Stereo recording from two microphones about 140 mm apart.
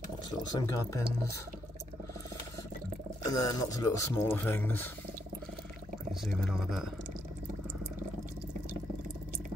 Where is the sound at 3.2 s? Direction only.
25° left (ahead or behind).